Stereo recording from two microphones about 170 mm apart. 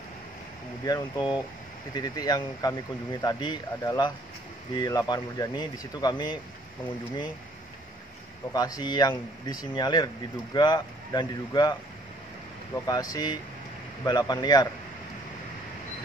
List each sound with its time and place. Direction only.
0.8 s speech: 25° left (ahead or behind)
8.5 s speech: 20° left (ahead or behind)
12.7 s speech: 20° left (ahead or behind)